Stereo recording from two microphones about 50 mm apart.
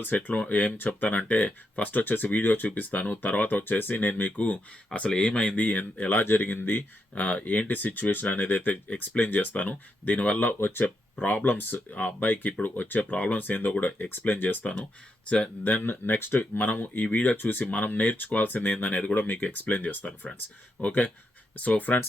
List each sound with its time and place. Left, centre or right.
0.0 s speech: left
14.6 s speech: left
15.6 s speech: left
16.4 s speech: left
19.1 s speech: left